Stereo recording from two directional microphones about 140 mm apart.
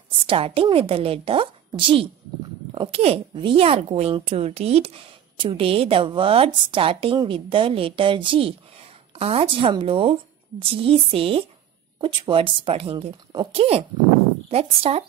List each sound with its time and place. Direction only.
0.3 s a woman's voice: 40° right (ahead or behind)